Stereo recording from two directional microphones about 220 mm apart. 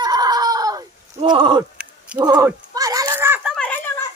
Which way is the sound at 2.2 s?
15° right (ahead or behind).